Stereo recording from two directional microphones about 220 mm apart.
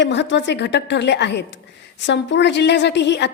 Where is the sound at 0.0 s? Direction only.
55° left (ahead or behind).